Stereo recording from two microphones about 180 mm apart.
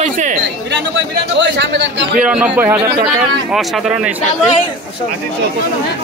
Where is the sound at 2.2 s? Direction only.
5° right (ahead or behind).